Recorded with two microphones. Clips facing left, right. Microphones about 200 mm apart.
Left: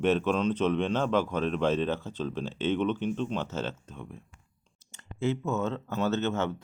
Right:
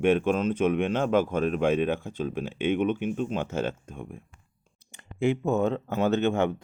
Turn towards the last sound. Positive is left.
turn(degrees=-15)  # may be behind; listen again after turning